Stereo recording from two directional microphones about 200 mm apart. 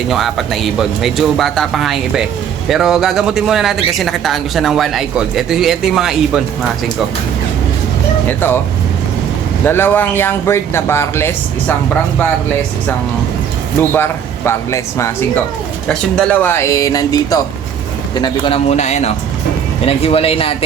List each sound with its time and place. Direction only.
0.1 s speech: centre (ahead or behind)
8.3 s speech: 10° left (ahead or behind)
9.6 s speech: 10° left (ahead or behind)
13.9 s speech: 10° left (ahead or behind); by 20.6 s 30° left (ahead or behind)